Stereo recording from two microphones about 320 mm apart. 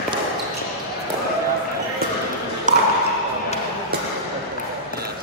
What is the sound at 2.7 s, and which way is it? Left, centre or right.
Ping, right.